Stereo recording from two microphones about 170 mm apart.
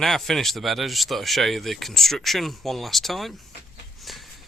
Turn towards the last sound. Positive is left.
turn(degrees=0)  # may be behind; listen again after turning